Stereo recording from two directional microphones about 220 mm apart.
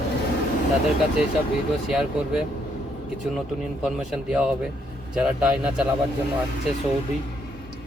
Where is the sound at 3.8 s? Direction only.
5° right (ahead or behind).